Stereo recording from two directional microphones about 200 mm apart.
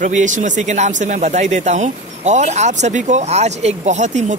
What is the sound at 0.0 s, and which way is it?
Speech, 40° right (ahead or behind).